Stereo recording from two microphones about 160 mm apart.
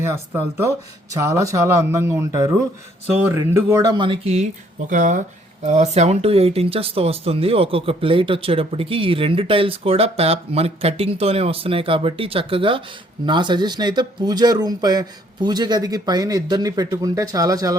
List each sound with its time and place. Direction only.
0.0 s speech: 15° right (ahead or behind); by 4.4 s 40° right (ahead or behind)
4.9 s speech: 50° right (ahead or behind); by 17.7 s 20° right (ahead or behind)